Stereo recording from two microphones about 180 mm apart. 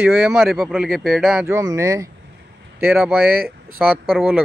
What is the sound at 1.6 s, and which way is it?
Speech, 20° right (ahead or behind).